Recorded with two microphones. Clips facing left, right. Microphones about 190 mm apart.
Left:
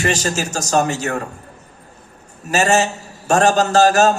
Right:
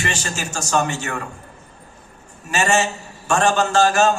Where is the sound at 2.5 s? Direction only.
40° left (ahead or behind).